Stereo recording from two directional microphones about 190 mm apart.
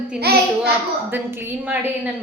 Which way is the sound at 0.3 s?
55° right (ahead or behind).